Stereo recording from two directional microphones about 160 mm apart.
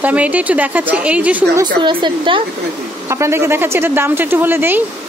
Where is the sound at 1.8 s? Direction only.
30° right (ahead or behind).